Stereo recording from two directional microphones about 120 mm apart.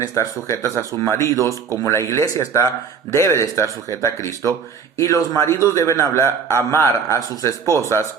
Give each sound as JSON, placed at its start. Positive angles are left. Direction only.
{"t": 0.0, "sound": "a man's voice", "side_deg": 25}
{"t": 1.4, "sound": "speech", "side_deg": -25}
{"t": 1.8, "sound": "a man's voice", "side_deg": 25}